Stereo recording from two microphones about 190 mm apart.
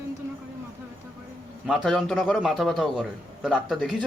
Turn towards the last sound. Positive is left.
turn(degrees=0)  # may be behind; listen again after turning